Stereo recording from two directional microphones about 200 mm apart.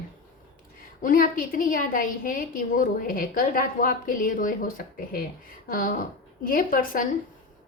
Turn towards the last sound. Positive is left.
turn(degrees=45)  # may be behind; listen again after turning